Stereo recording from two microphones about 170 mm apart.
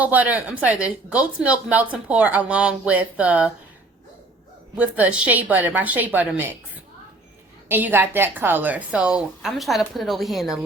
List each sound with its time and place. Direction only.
0.0 s speech: 10° right (ahead or behind)
4.8 s speech: 10° right (ahead or behind)
7.7 s a woman's voice: 10° right (ahead or behind)